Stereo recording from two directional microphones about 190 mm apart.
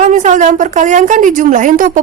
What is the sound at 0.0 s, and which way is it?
A woman's voice, 40° right (ahead or behind).